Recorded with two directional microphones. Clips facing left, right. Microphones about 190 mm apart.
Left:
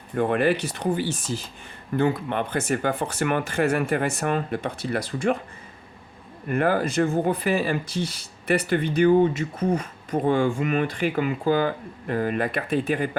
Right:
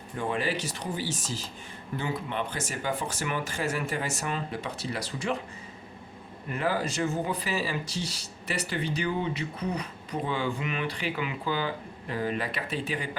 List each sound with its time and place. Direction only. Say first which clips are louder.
0.2 s speech: left 8 dB; 60° left (ahead or behind)
6.5 s speech: left 7 dB; 55° left (ahead or behind)